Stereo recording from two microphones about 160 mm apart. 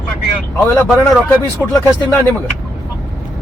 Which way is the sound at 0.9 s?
Centre (ahead or behind).